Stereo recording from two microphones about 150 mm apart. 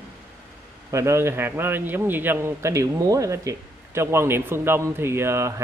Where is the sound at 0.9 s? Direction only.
20° right (ahead or behind).